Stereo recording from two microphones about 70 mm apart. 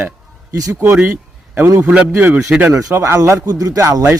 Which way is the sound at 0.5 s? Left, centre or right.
Right.